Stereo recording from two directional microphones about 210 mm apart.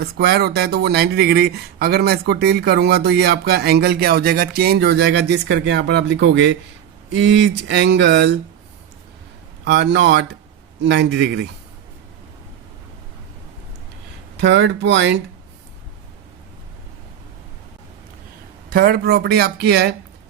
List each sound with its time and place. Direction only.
0.0 s speech: 50° right (ahead or behind)
9.6 s speech: 55° right (ahead or behind)
14.4 s speech: 55° right (ahead or behind)
18.7 s speech: 45° right (ahead or behind)